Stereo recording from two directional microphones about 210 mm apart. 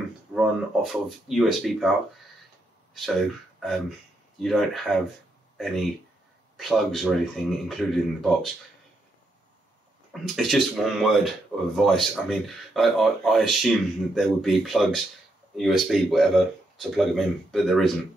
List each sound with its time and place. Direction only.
0.3 s speech: centre (ahead or behind)
6.5 s speech: centre (ahead or behind)
10.2 s speech: centre (ahead or behind)